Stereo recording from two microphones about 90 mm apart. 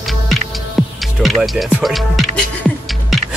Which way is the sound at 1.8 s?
Centre (ahead or behind).